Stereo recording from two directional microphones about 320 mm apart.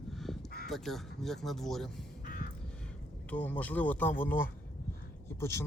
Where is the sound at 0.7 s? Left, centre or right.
Centre.